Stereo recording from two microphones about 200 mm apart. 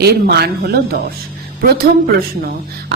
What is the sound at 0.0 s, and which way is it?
Speech, 55° right (ahead or behind).